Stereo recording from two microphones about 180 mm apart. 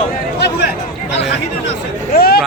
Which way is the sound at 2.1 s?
60° left (ahead or behind).